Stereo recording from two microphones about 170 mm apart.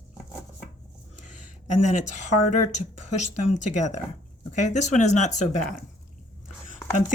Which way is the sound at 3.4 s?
45° left (ahead or behind).